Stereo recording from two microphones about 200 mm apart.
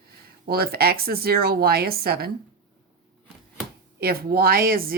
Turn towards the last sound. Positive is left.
turn(degrees=-45)  # may be behind; listen again after turning